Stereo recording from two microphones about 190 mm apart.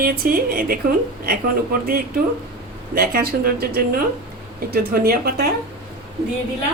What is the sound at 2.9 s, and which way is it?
A woman's voice, 50° right (ahead or behind).